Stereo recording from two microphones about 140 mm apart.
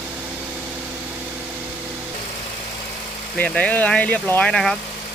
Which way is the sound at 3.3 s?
10° left (ahead or behind).